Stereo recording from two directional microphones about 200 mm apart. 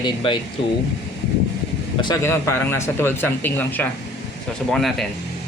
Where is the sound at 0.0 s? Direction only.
25° left (ahead or behind).